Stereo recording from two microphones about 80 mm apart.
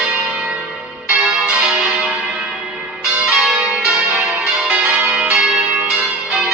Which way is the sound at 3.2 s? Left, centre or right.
Centre.